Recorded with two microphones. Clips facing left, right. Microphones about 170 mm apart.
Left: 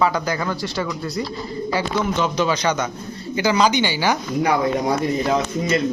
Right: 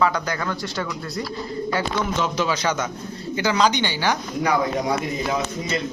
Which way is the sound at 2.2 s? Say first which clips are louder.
Left 3 dB; centre (ahead or behind).